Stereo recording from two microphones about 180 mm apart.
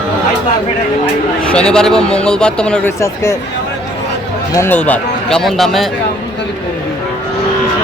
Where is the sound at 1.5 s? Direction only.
5° left (ahead or behind).